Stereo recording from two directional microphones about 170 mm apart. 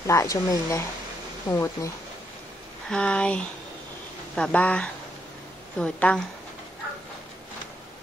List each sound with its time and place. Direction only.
0.0 s speech: 15° left (ahead or behind)
2.9 s speech: 5° left (ahead or behind)